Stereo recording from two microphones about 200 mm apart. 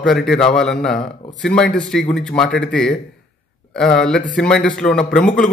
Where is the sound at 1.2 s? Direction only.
40° left (ahead or behind).